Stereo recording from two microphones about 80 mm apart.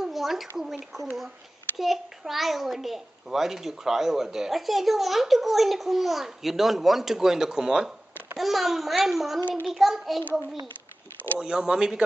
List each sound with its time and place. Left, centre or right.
0.0 s a sound: centre
0.9 s a child's voice: centre
11.3 s speech: centre